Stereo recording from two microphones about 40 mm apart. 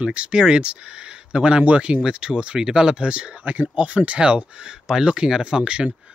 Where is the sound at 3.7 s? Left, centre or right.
Right.